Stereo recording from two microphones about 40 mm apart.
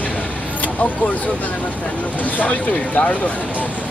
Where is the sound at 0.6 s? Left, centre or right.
Left.